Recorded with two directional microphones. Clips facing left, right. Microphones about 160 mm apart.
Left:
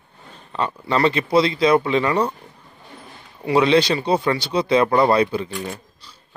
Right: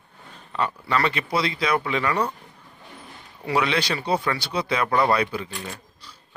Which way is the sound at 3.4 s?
25° left (ahead or behind).